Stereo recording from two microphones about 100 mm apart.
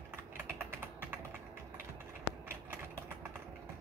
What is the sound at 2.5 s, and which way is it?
Typing, 20° right (ahead or behind).